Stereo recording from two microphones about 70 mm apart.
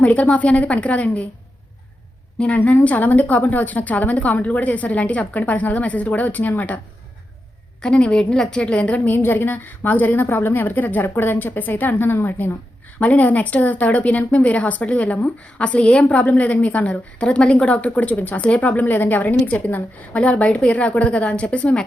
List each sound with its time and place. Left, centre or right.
0.0 s a woman's voice: centre
2.4 s a woman's voice: centre
7.8 s a woman's voice: centre
9.0 s a woman's voice: left
13.0 s a woman's voice: left